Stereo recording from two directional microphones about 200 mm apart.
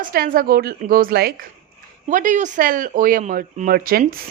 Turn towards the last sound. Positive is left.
turn(degrees=-45)  # may be behind; listen again after turning